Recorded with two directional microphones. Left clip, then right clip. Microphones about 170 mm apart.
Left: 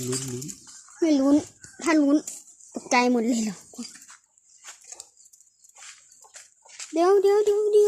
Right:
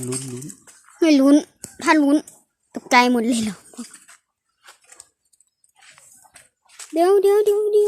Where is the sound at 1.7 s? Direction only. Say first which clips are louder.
Right 5 dB; 25° right (ahead or behind).